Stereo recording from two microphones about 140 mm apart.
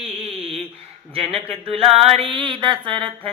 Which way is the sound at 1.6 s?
45° right (ahead or behind).